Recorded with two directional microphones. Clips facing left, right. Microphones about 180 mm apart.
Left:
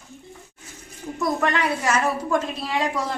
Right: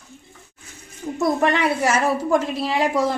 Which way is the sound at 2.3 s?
25° right (ahead or behind).